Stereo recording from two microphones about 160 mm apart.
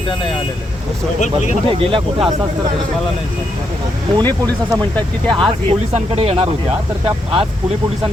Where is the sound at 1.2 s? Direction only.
50° left (ahead or behind).